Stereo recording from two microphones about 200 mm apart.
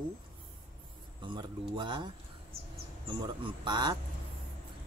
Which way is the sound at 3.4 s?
20° right (ahead or behind).